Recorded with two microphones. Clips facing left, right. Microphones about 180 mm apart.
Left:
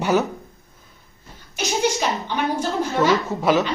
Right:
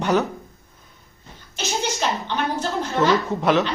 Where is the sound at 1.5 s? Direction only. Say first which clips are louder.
Left 4 dB; 10° left (ahead or behind).